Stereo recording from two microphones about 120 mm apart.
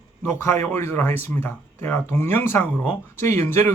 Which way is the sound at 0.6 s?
20° left (ahead or behind).